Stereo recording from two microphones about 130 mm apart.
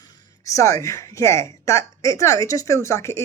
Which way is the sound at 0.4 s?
25° left (ahead or behind).